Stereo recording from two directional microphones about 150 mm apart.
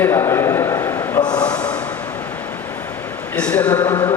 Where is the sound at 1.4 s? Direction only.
10° left (ahead or behind).